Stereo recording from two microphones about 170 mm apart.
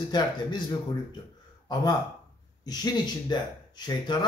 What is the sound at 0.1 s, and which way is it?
Speech, 25° left (ahead or behind).